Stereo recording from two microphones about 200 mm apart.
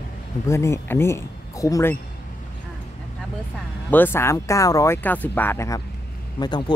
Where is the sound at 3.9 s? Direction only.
10° left (ahead or behind).